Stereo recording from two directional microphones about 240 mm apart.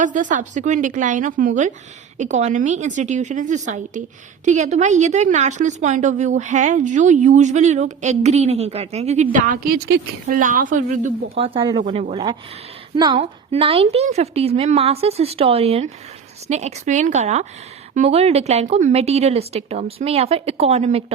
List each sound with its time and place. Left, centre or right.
0.0 s a woman's voice: right